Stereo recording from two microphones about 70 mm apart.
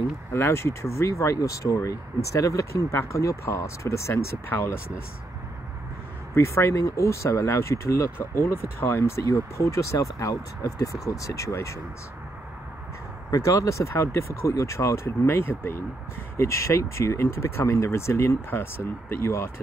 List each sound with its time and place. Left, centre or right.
0.3 s speech: left
6.3 s speech: left
13.3 s speech: left
16.3 s speech: left